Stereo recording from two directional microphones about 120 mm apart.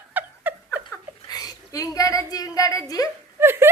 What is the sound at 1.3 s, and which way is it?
Speech, 30° left (ahead or behind).